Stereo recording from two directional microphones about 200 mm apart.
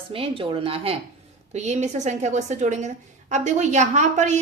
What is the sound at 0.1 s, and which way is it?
A woman's voice, 25° right (ahead or behind).